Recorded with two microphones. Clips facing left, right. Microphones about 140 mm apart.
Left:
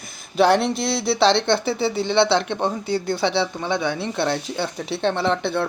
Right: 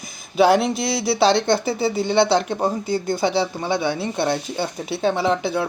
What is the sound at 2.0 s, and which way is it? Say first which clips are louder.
Speech: right 1 dB; 45° right (ahead or behind).